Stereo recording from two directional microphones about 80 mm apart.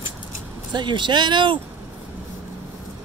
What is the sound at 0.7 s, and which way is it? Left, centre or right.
Speech, right.